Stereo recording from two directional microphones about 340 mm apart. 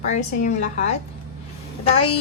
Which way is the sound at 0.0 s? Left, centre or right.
Left.